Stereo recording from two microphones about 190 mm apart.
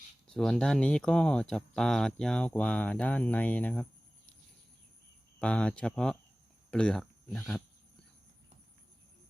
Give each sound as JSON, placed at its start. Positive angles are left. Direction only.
{"t": 0.3, "sound": "speech", "side_deg": 5}
{"t": 5.4, "sound": "speech", "side_deg": 5}